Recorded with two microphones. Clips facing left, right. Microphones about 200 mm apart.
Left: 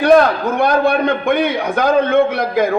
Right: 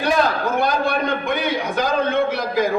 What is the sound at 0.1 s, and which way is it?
A man's voice, 60° left (ahead or behind).